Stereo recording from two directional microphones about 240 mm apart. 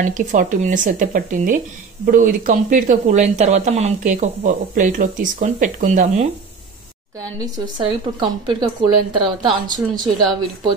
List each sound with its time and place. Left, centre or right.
0.0 s speech: right
7.2 s a woman's voice: centre